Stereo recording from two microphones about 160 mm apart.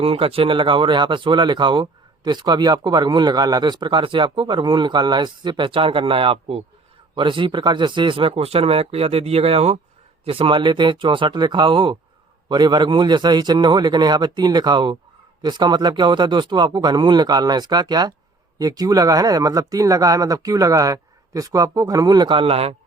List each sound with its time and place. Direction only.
0.0 s speech: 35° right (ahead or behind)